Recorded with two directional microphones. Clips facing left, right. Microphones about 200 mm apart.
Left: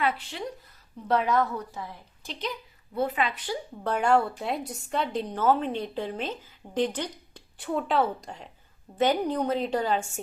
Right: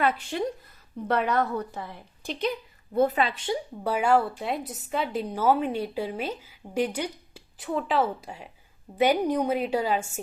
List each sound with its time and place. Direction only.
0.0 s speech: 50° right (ahead or behind)
1.0 s a woman's voice: 60° right (ahead or behind)
2.9 s a woman's voice: 45° right (ahead or behind); by 3.6 s 25° right (ahead or behind)
3.8 s a woman's voice: 5° right (ahead or behind)